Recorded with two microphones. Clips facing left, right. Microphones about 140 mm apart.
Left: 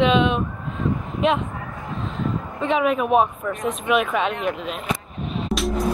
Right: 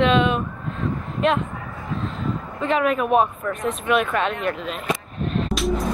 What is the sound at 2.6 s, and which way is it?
Speech, centre (ahead or behind).